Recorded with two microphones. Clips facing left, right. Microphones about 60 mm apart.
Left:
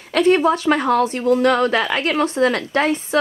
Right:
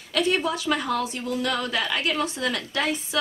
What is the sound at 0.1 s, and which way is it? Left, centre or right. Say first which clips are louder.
A woman's voice: left 9 dB; left.